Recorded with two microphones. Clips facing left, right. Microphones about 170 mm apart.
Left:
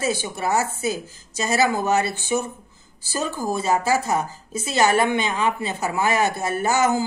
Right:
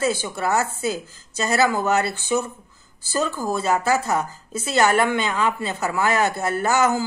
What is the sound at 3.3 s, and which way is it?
Speech, 15° left (ahead or behind).